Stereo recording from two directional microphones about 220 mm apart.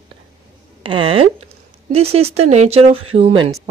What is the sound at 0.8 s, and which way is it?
Speech, 25° right (ahead or behind).